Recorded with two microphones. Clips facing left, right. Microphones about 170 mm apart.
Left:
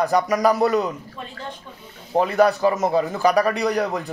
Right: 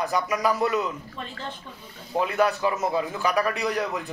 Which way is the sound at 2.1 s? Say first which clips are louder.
Left 6 dB; 35° left (ahead or behind).